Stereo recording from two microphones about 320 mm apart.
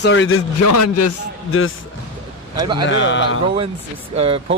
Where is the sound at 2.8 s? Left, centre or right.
Left.